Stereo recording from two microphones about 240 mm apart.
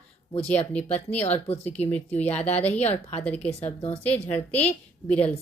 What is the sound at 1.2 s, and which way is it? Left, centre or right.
Speech, left.